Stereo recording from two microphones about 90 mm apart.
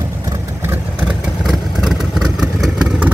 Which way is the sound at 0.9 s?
5° right (ahead or behind).